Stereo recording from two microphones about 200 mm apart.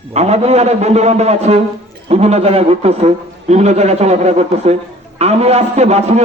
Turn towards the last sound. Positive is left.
turn(degrees=-35)  # may be behind; listen again after turning